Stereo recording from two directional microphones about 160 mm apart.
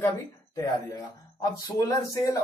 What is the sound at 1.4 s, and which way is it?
Speech, 20° left (ahead or behind).